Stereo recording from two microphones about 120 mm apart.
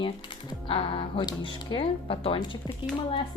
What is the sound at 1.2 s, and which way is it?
A woman's voice, 40° left (ahead or behind).